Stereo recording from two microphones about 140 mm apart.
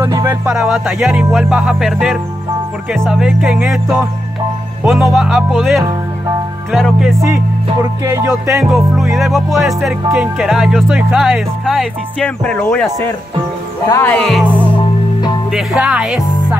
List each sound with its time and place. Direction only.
0.0 s music: 20° right (ahead or behind)
0.5 s speech: 5° right (ahead or behind)
8.0 s music: 20° right (ahead or behind)
8.3 s speech: 5° right (ahead or behind); by 13.1 s 15° left (ahead or behind)
13.8 s music: 20° left (ahead or behind)
14.1 s speech: 5° left (ahead or behind)
15.5 s speech: 5° right (ahead or behind)